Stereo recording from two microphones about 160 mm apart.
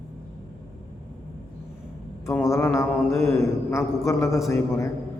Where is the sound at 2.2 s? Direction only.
20° left (ahead or behind).